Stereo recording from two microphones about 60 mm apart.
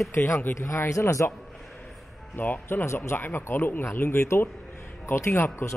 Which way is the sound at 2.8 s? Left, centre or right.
Left.